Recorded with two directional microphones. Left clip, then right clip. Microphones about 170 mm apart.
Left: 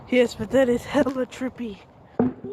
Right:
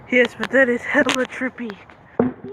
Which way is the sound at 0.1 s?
25° left (ahead or behind).